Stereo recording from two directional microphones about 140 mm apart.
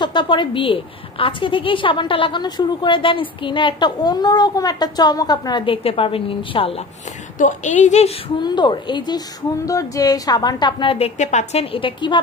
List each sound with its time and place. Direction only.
0.0 s a woman's voice: 35° left (ahead or behind)
5.7 s a woman's voice: 40° left (ahead or behind)
7.3 s a woman's voice: 60° left (ahead or behind)
8.4 s a woman's voice: 30° left (ahead or behind)
11.1 s a woman's voice: 55° left (ahead or behind); by 12.2 s 35° left (ahead or behind)